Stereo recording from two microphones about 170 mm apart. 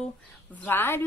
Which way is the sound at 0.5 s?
10° left (ahead or behind).